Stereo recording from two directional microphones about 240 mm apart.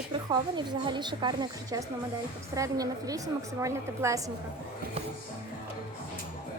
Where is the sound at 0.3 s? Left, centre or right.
Centre.